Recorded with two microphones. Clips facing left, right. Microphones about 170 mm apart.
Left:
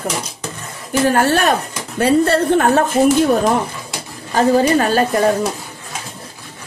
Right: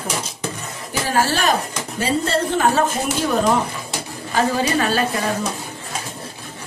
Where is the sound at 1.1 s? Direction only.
55° left (ahead or behind).